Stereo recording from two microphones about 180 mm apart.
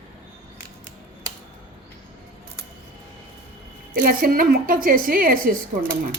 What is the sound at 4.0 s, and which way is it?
A man's voice, 55° right (ahead or behind).